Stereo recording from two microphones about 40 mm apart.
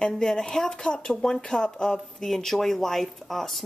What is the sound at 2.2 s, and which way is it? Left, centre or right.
Speech, centre.